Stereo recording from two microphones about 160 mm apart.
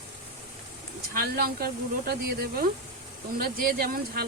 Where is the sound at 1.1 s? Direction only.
70° right (ahead or behind).